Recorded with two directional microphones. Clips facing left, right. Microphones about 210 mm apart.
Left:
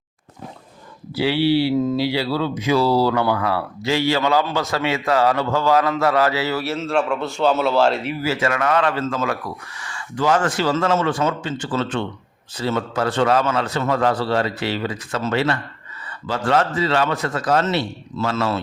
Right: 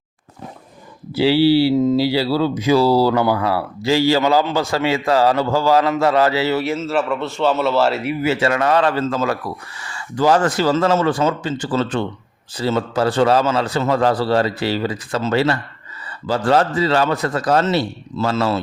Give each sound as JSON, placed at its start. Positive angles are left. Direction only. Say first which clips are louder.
{"t": 1.1, "sound": "speech", "louder": "right 4 dB", "side_deg": -30}
{"t": 1.7, "sound": "speech", "louder": "right 4 dB", "side_deg": -20}
{"t": 2.0, "sound": "speech", "louder": "right 4 dB", "side_deg": -35}
{"t": 6.7, "sound": "a man's voice", "louder": "right 1 dB", "side_deg": -5}
{"t": 8.2, "sound": "speech", "louder": "right 4 dB", "side_deg": -25}